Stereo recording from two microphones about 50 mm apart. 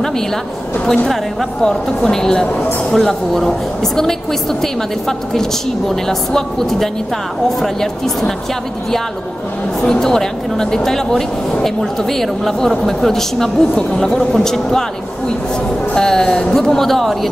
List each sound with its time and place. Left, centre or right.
1.0 s speech: centre
9.8 s speech: centre